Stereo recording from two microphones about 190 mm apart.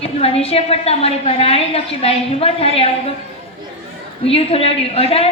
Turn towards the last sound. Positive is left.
turn(degrees=30)  # may be behind; listen again after turning